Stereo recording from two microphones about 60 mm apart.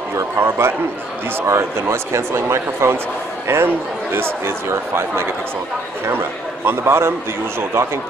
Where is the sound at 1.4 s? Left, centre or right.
Right.